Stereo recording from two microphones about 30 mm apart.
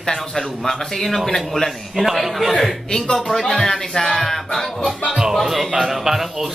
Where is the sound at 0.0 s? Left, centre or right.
Centre.